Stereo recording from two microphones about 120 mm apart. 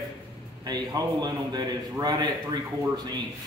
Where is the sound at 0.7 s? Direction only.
35° right (ahead or behind).